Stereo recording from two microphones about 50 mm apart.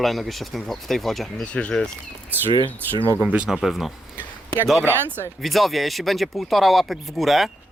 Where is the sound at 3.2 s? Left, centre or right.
Right.